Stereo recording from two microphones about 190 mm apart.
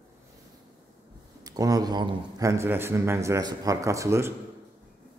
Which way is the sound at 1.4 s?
20° right (ahead or behind).